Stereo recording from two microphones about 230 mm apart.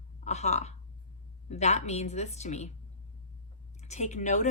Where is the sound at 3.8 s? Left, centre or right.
Left.